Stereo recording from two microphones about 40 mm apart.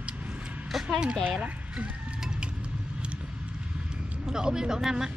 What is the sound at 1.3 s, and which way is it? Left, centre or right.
Speech, right.